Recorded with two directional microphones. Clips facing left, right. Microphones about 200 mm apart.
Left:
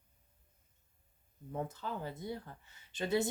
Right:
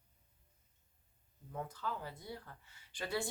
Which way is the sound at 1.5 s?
25° left (ahead or behind).